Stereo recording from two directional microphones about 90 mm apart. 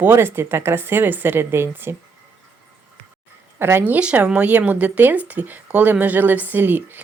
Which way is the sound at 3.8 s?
15° right (ahead or behind).